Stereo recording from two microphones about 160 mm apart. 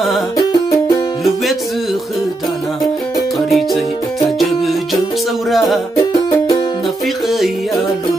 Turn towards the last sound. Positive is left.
turn(degrees=0)  # may be behind; listen again after turning